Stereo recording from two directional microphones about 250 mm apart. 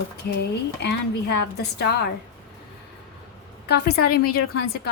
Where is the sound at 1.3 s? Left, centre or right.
Left.